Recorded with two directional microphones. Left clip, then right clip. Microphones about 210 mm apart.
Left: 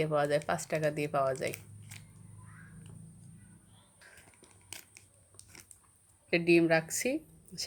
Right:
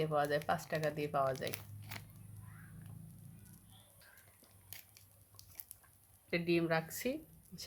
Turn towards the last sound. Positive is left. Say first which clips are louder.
# left 7 dB
turn(degrees=20)  # may be behind; listen again after turning